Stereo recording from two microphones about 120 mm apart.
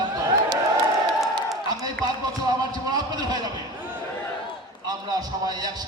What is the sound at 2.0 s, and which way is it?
A man's voice, 35° right (ahead or behind).